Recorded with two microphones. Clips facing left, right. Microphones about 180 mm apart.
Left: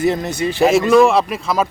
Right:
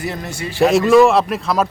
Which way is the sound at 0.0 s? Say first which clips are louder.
Left 8 dB; 20° left (ahead or behind).